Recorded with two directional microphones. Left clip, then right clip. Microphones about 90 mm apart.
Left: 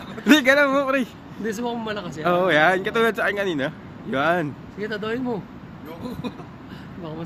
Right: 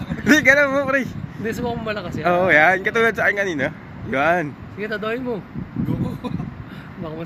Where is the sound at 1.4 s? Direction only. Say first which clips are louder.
Right 2 dB; 25° left (ahead or behind).